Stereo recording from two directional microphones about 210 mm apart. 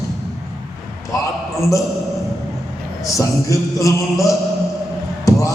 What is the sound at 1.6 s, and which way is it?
Speech, 15° left (ahead or behind).